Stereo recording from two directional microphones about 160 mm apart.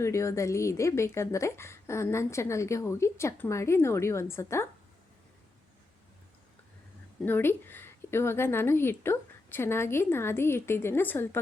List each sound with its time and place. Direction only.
0.0 s a woman's voice: 20° left (ahead or behind)
7.2 s a woman's voice: 10° left (ahead or behind)